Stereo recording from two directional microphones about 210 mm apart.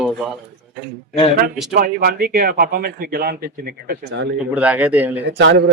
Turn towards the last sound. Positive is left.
turn(degrees=-55)  # may be behind; listen again after turning